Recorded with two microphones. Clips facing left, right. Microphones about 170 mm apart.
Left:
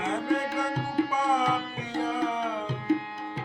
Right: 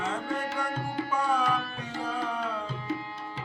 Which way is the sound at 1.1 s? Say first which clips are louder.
Left 1 dB; 15° left (ahead or behind).